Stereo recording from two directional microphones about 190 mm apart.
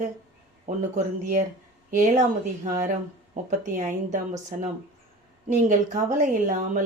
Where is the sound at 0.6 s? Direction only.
40° right (ahead or behind).